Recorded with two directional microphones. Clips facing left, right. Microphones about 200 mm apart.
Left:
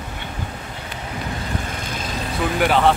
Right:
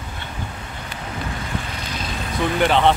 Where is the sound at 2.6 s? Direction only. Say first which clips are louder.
Even; 5° left (ahead or behind).